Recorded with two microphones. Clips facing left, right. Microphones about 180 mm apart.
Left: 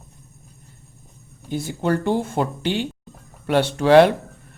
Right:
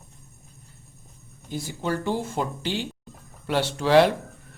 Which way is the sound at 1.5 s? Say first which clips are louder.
Left 6 dB; 60° left (ahead or behind).